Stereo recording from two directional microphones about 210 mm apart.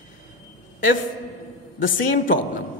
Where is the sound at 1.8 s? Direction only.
40° left (ahead or behind).